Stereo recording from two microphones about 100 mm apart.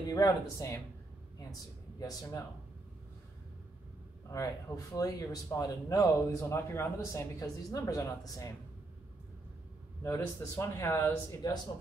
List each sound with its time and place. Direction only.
0.1 s a woman's voice: 35° left (ahead or behind)
4.3 s a woman's voice: 35° left (ahead or behind)
7.3 s a woman's voice: 35° left (ahead or behind)
10.0 s a man's voice: 25° left (ahead or behind)